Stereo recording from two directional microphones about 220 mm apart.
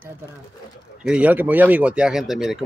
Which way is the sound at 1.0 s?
5° right (ahead or behind).